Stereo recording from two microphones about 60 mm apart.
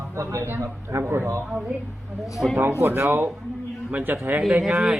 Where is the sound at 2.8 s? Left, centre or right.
Right.